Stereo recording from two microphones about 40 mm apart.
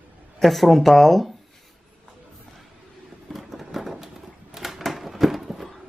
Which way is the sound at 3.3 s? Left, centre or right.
Centre.